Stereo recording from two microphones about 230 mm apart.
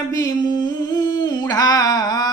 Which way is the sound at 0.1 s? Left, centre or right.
Centre.